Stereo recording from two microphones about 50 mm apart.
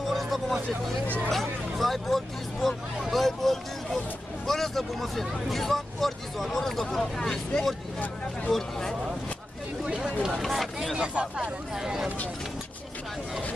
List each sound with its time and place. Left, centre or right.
0.0 s music: centre
1.3 s speech: centre
10.5 s speech: centre
11.0 s speech: centre
11.7 s speech: centre